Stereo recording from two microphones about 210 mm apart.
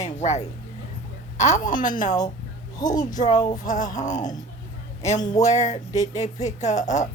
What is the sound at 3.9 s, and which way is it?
Speech, 35° left (ahead or behind).